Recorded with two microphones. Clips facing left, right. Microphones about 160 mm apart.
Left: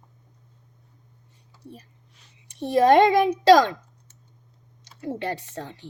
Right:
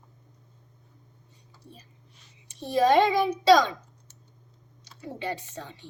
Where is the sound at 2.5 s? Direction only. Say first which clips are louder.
Left 4 dB; 60° left (ahead or behind).